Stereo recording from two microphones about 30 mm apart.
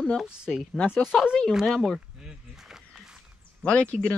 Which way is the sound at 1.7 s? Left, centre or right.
Centre.